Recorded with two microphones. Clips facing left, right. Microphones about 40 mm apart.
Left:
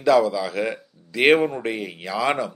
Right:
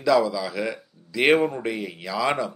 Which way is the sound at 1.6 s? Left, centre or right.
Left.